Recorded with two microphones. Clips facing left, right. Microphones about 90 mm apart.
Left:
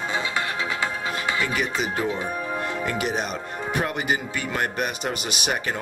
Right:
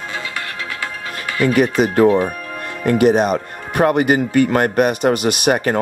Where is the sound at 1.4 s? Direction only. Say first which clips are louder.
Right 16 dB; 50° right (ahead or behind).